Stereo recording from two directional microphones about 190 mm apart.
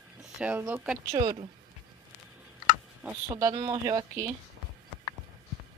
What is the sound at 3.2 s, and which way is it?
Speech, 20° right (ahead or behind).